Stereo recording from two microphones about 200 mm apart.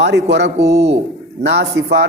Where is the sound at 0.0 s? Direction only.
60° right (ahead or behind).